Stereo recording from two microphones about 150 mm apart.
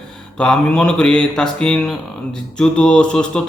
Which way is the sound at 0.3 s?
5° left (ahead or behind).